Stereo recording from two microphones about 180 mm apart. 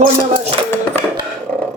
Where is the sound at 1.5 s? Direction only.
5° left (ahead or behind).